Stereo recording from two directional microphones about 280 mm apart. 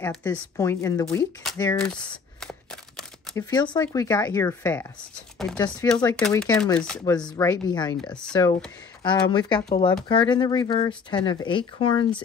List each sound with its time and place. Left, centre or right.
0.0 s speech: centre
1.8 s a sound: centre
3.4 s speech: centre